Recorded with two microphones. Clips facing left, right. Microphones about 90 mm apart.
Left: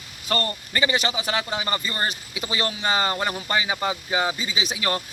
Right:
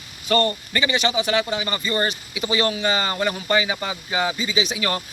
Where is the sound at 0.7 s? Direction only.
35° left (ahead or behind).